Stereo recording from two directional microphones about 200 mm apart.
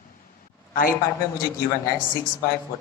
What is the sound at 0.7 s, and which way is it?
Speech, 45° left (ahead or behind).